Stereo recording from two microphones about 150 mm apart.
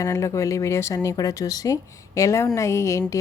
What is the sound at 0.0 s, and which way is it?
A woman's voice, 20° left (ahead or behind).